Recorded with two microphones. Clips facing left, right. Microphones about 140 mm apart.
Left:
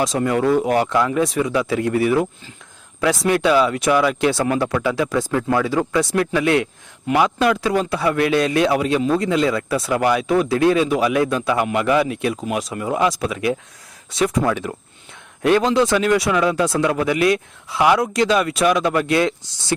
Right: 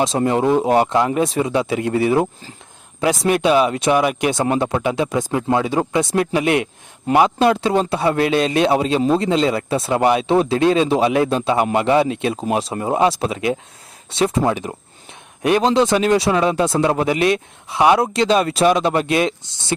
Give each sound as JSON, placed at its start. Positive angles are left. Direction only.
{"t": 0.0, "sound": "a man's voice", "side_deg": -25}